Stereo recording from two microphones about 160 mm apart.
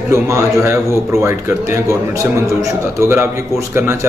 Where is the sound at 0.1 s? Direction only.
15° right (ahead or behind).